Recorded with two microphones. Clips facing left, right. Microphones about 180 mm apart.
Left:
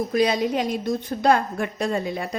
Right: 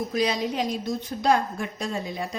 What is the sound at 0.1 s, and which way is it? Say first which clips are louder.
A woman's voice: left 6 dB; 55° left (ahead or behind).